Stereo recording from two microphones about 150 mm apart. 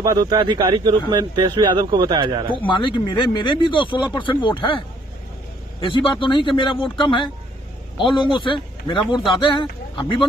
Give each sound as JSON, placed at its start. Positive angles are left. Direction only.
{"t": 0.0, "sound": "speech", "side_deg": -25}
{"t": 2.6, "sound": "speech", "side_deg": 35}
{"t": 5.9, "sound": "speech", "side_deg": 35}